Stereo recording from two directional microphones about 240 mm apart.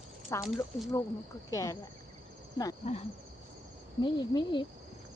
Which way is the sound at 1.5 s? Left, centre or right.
Centre.